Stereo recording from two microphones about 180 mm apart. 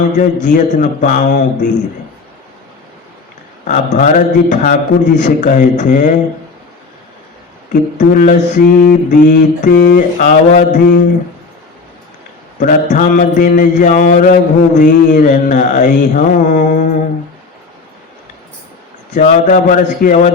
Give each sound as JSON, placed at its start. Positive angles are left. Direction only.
{"t": 0.4, "sound": "mantra", "side_deg": 45}
{"t": 3.7, "sound": "mantra", "side_deg": 45}
{"t": 7.9, "sound": "mantra", "side_deg": 45}
{"t": 12.5, "sound": "mantra", "side_deg": 45}
{"t": 19.1, "sound": "mantra", "side_deg": 45}